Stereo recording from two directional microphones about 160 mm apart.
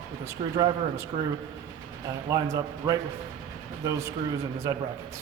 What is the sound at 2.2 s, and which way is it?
Speech, 20° right (ahead or behind).